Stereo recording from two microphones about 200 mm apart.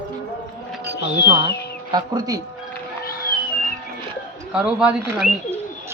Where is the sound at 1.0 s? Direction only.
60° left (ahead or behind).